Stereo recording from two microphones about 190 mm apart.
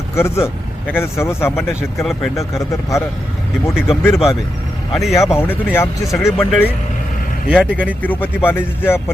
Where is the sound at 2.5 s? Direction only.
15° left (ahead or behind).